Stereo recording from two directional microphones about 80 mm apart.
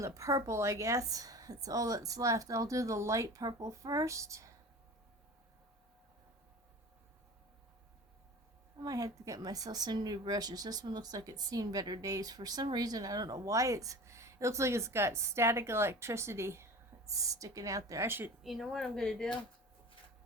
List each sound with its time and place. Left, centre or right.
0.0 s a woman's voice: right
8.8 s a woman's voice: right
17.1 s a woman's voice: right
18.4 s speech: centre